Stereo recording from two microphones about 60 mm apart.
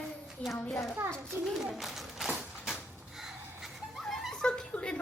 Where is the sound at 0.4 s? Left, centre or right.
Left.